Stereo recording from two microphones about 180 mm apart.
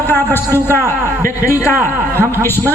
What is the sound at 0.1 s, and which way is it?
A man's voice, 10° left (ahead or behind).